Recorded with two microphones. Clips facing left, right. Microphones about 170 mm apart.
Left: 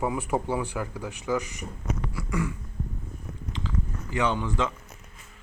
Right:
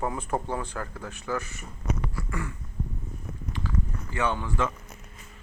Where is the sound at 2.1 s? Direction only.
15° left (ahead or behind).